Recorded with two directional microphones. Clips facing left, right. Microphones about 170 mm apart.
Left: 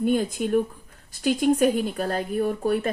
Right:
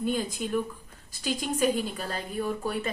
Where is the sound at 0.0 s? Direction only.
60° left (ahead or behind).